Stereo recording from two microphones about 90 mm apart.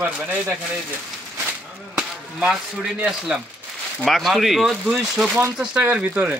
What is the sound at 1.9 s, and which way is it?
Speech, 10° right (ahead or behind).